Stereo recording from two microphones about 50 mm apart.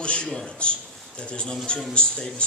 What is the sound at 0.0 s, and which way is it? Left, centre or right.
A man's voice, left.